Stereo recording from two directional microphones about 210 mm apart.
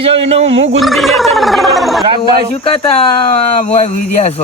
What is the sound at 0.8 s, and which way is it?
Speech, centre (ahead or behind).